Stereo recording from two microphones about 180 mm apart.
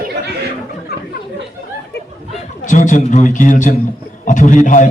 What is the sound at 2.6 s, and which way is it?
A man's voice, 45° left (ahead or behind).